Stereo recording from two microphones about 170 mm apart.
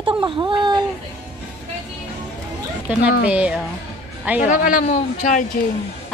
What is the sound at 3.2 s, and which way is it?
Speech, 5° right (ahead or behind).